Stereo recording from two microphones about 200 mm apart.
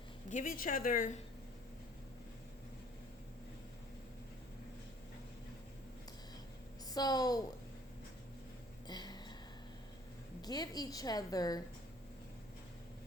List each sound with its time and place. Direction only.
0.3 s speech: 40° left (ahead or behind)
6.9 s a woman's voice: 20° left (ahead or behind)
8.9 s a sound: 20° left (ahead or behind)
10.4 s a woman's voice: 20° left (ahead or behind)